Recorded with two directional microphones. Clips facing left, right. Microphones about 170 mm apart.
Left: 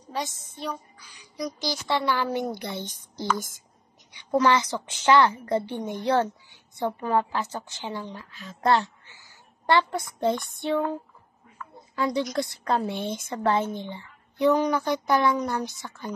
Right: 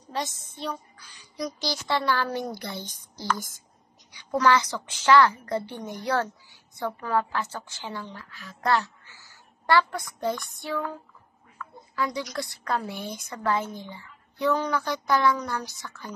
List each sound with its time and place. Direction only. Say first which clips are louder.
0.1 s a woman's voice: even; 10° left (ahead or behind)